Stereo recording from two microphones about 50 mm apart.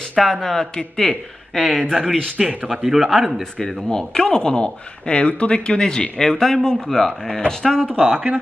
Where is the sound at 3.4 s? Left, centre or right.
Centre.